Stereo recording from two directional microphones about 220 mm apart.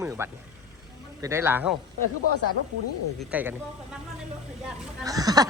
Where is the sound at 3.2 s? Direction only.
5° right (ahead or behind).